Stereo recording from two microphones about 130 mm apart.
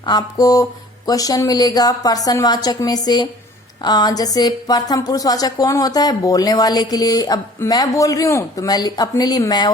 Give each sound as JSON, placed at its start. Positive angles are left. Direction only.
{"t": 0.0, "sound": "speech", "side_deg": 35}